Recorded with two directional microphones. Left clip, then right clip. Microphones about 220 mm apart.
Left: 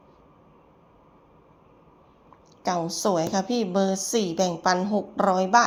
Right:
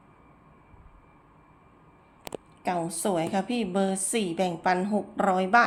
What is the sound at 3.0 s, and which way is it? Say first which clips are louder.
Speech: left 4 dB; 5° left (ahead or behind).